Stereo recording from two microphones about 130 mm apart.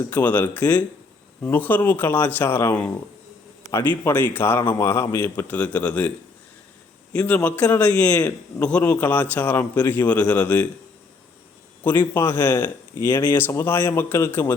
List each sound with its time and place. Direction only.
0.1 s a man's voice: 15° left (ahead or behind)
7.1 s a man's voice: 10° left (ahead or behind)
11.8 s a man's voice: 15° left (ahead or behind)